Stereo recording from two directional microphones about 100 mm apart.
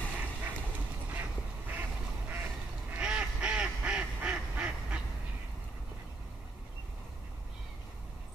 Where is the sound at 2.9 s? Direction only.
10° right (ahead or behind).